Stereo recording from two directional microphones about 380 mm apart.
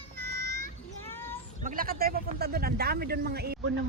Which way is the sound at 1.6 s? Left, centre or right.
Right.